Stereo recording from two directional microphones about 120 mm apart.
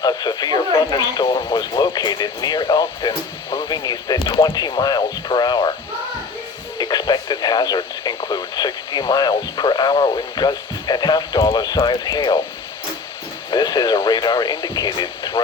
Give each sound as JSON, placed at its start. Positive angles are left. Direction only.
{"t": 0.0, "sound": "speech", "side_deg": 35}
{"t": 6.7, "sound": "speech", "side_deg": 35}
{"t": 13.5, "sound": "speech", "side_deg": 35}